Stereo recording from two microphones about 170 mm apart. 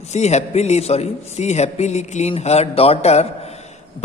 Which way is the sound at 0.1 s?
40° left (ahead or behind).